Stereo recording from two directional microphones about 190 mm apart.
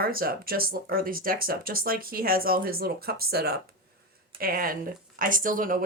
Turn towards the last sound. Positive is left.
turn(degrees=-45)  # may be behind; listen again after turning